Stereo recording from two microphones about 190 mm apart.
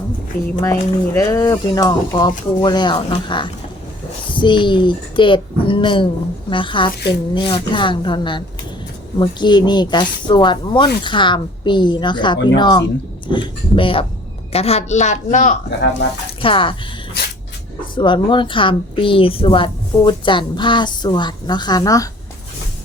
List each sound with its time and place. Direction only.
0.6 s a woman's voice: 15° left (ahead or behind); by 15.5 s 40° left (ahead or behind)
16.4 s a woman's voice: 25° left (ahead or behind)
17.9 s a woman's voice: 25° left (ahead or behind)